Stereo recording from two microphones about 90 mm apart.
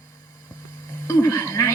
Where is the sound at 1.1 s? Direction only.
40° left (ahead or behind).